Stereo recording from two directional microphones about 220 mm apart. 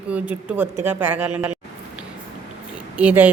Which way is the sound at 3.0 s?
5° right (ahead or behind).